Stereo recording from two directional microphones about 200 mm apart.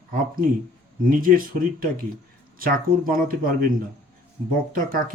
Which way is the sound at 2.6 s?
45° right (ahead or behind).